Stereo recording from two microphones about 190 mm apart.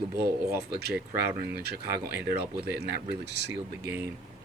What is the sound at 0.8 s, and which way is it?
Speech, 55° right (ahead or behind).